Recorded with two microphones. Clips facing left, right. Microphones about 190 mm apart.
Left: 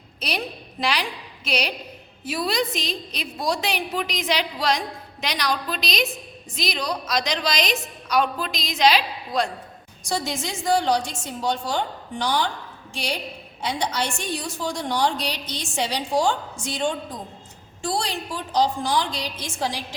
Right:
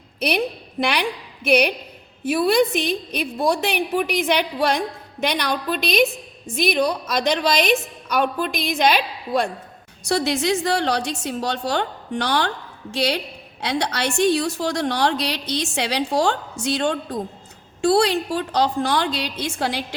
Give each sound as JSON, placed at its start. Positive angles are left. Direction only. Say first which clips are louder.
{"t": 0.2, "sound": "a woman's voice", "louder": "right 7 dB", "side_deg": -60}
{"t": 10.0, "sound": "a woman's voice", "louder": "right 6 dB", "side_deg": -70}